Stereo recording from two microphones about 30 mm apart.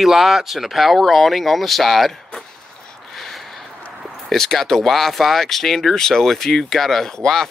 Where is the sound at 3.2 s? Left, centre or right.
Centre.